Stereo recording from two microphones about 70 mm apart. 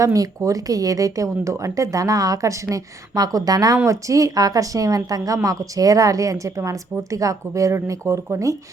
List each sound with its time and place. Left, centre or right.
0.0 s speech: right
3.8 s speech: right